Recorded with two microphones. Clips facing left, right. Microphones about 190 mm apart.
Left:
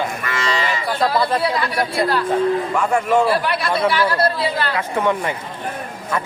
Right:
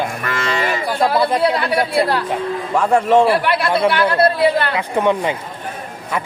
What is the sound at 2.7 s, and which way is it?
Speech, 30° right (ahead or behind).